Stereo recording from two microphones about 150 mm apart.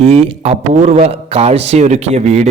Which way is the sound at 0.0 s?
40° right (ahead or behind).